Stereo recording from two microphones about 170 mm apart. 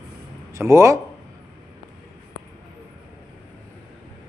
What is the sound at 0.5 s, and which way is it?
Speech, 15° right (ahead or behind).